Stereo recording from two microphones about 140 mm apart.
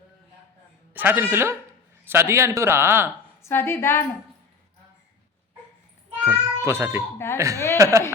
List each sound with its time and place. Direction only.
0.9 s a man's voice: 15° right (ahead or behind)
3.5 s a woman's voice: 15° left (ahead or behind)
6.2 s cat: 20° right (ahead or behind)
7.3 s speech: 20° right (ahead or behind)